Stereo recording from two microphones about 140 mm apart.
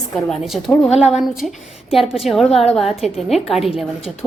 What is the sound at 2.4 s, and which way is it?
Speech, 50° left (ahead or behind).